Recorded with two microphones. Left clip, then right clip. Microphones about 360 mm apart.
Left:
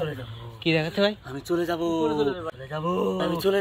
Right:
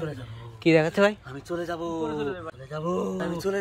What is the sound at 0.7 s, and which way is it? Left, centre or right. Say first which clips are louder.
Speech: right 3 dB; centre.